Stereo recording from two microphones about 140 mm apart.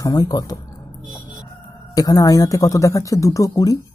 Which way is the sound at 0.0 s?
25° left (ahead or behind).